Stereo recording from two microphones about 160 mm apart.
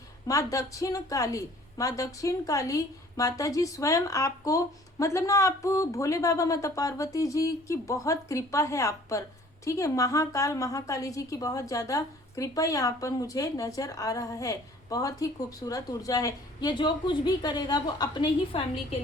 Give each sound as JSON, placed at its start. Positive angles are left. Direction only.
{"t": 0.3, "sound": "a woman's voice", "side_deg": 20}